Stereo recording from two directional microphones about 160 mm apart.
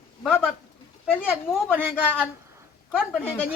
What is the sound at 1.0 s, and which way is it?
Speech, 10° left (ahead or behind).